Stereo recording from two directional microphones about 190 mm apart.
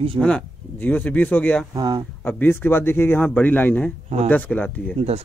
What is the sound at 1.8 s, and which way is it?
Speech, 25° right (ahead or behind).